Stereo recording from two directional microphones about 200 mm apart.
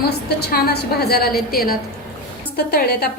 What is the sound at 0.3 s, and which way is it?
Speech, 55° left (ahead or behind).